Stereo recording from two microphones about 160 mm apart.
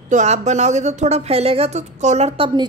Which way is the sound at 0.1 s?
45° right (ahead or behind).